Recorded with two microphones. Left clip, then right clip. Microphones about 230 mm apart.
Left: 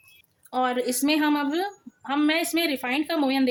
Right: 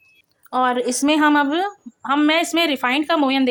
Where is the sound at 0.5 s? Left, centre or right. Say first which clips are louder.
Right 6 dB; centre.